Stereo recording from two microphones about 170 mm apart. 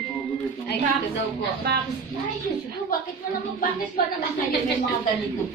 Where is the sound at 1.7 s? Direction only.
70° right (ahead or behind).